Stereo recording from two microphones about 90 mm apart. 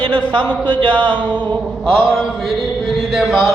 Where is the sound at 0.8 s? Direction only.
65° right (ahead or behind).